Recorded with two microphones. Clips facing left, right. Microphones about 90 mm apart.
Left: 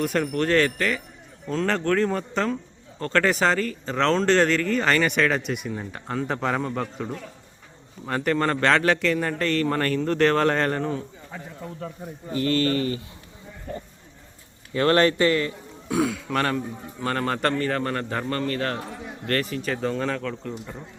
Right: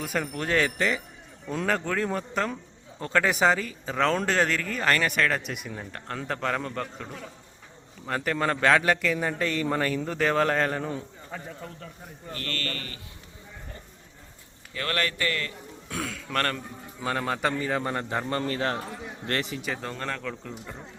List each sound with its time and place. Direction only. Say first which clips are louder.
0.0 s a man's voice: left 6 dB; centre (ahead or behind)
12.3 s speech: left 12 dB; 15° left (ahead or behind)
14.7 s a man's voice: left 11 dB; 30° left (ahead or behind); by 19.7 s 20° right (ahead or behind)
19.7 s speech: left 10 dB; centre (ahead or behind)